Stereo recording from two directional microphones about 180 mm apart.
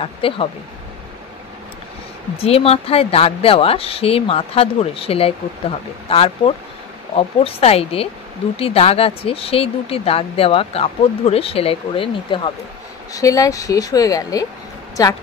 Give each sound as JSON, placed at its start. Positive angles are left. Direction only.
{"t": 0.0, "sound": "speech", "side_deg": 30}
{"t": 2.3, "sound": "speech", "side_deg": 35}
{"t": 13.1, "sound": "a woman's voice", "side_deg": 20}